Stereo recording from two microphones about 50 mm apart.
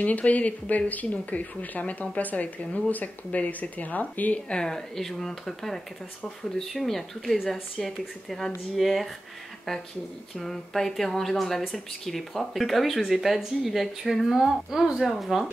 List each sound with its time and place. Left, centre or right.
0.0 s speech: left
4.5 s speech: centre